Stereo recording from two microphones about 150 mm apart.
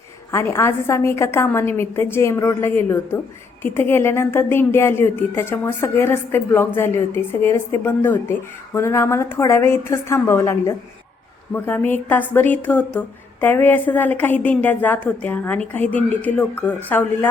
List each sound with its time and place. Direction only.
0.3 s a woman's voice: 20° left (ahead or behind)